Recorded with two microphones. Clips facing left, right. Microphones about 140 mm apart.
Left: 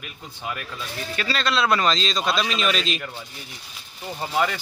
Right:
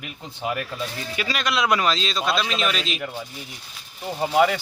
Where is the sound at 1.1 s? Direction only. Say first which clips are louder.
Left 2 dB; 15° right (ahead or behind).